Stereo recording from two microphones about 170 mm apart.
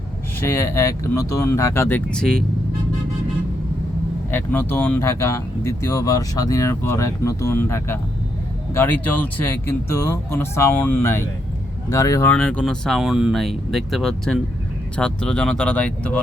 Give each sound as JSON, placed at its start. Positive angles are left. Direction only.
{"t": 0.3, "sound": "speech", "side_deg": 15}
{"t": 4.3, "sound": "speech", "side_deg": 10}
{"t": 12.3, "sound": "speech", "side_deg": 5}